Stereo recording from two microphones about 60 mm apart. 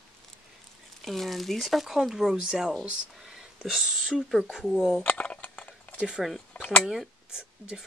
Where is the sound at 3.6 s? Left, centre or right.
Centre.